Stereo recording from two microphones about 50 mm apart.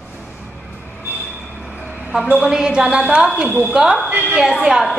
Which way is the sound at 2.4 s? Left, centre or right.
Centre.